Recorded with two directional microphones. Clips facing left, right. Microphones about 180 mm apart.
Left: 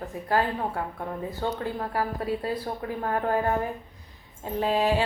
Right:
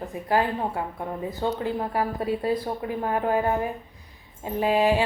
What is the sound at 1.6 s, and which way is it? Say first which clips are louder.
A woman's voice: right 3 dB; 20° right (ahead or behind).